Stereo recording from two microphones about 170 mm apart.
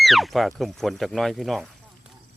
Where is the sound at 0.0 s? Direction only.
Centre (ahead or behind).